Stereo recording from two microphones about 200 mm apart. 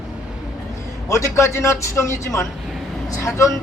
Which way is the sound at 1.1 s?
15° left (ahead or behind).